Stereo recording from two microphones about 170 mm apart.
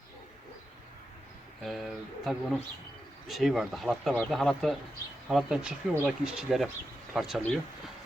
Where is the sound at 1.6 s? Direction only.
Centre (ahead or behind).